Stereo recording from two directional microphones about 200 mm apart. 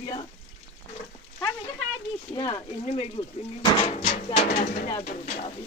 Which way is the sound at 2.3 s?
25° left (ahead or behind).